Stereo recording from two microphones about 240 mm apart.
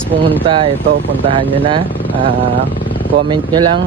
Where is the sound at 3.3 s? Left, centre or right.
Centre.